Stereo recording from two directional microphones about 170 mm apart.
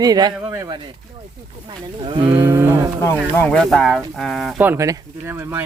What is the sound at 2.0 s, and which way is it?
Speech, 30° right (ahead or behind).